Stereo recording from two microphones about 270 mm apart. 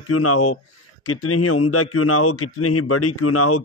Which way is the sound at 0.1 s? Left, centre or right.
Left.